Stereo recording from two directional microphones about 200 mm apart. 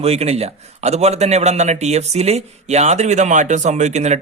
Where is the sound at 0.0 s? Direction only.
30° right (ahead or behind).